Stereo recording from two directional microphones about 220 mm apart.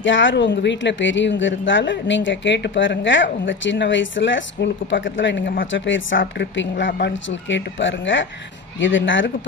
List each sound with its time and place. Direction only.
0.0 s a woman's voice: 60° left (ahead or behind)
5.7 s a woman's voice: 60° left (ahead or behind)